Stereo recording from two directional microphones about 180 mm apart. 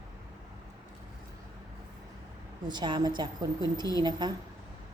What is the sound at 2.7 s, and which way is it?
Speech, 25° right (ahead or behind).